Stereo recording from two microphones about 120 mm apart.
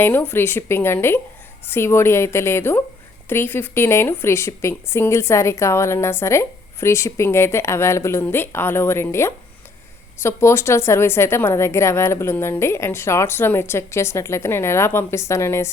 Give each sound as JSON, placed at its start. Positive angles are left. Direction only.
{"t": 0.0, "sound": "speech", "side_deg": 15}